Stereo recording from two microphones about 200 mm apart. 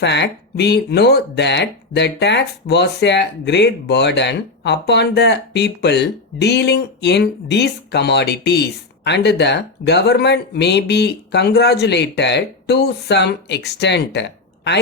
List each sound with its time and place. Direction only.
0.0 s speech: 60° left (ahead or behind)